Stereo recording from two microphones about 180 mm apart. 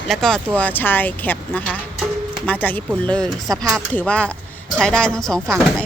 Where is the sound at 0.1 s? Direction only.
5° left (ahead or behind).